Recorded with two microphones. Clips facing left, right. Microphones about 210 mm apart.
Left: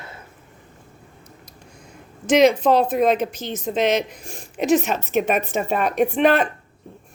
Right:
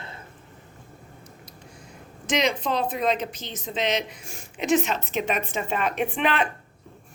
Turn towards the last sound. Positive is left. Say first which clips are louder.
# left 7 dB
turn(degrees=45)  # may be behind; listen again after turning